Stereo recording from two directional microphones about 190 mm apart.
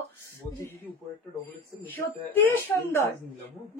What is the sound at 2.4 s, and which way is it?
Child singing, 10° left (ahead or behind).